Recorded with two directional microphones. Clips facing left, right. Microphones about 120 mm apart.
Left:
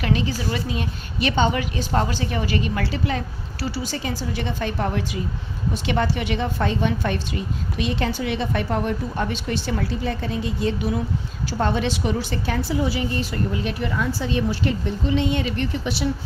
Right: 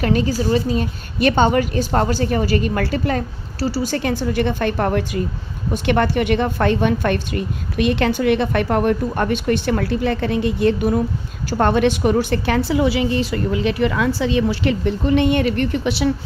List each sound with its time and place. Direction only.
0.0 s a woman's voice: 45° right (ahead or behind)
3.8 s a woman's voice: 60° right (ahead or behind)